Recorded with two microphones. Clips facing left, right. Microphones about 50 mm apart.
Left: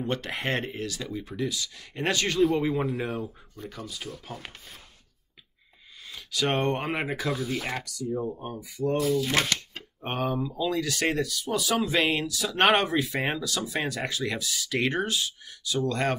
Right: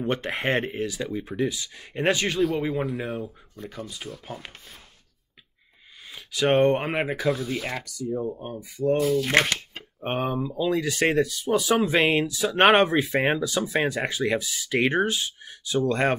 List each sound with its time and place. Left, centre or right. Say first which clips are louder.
0.0 s speech: right 4 dB; right
2.4 s speech: left 3 dB; centre
6.1 s speech: right 6 dB; centre
8.8 s speech: right 4 dB; right
9.2 s speech: right 5 dB; right
9.5 s speech: right 1 dB; centre